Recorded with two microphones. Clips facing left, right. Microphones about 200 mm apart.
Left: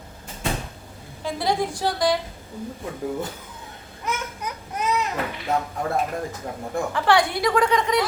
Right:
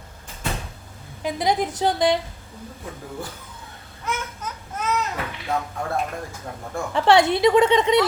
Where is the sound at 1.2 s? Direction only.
20° right (ahead or behind).